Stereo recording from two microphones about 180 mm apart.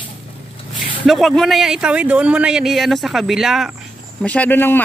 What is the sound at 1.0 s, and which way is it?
Speech, centre (ahead or behind).